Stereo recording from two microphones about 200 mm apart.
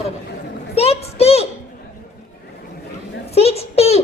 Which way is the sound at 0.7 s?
30° left (ahead or behind).